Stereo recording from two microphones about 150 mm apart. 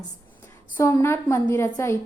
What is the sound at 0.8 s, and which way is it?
A woman's voice, 20° left (ahead or behind).